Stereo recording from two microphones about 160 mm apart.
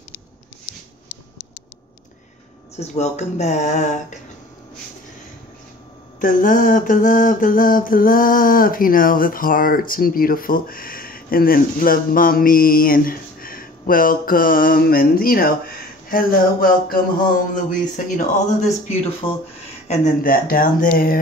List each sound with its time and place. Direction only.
2.7 s speech: 40° left (ahead or behind)
6.2 s mantra: 55° left (ahead or behind)
20.2 s mantra: 65° left (ahead or behind)